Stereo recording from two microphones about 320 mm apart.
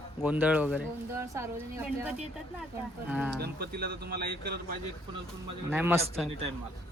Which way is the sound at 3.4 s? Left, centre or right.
Right.